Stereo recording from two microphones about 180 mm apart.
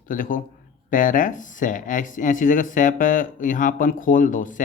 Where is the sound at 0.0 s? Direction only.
50° left (ahead or behind).